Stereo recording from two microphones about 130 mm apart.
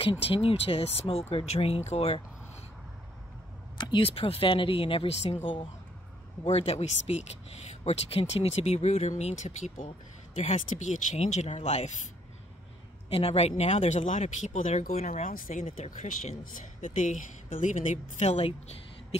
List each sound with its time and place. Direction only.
0.0 s speech: 45° left (ahead or behind)
3.7 s a woman's voice: 35° left (ahead or behind); by 11.9 s 60° left (ahead or behind)
13.1 s speech: 50° left (ahead or behind); by 15.6 s 90° left
15.6 s a woman's voice: 65° left (ahead or behind)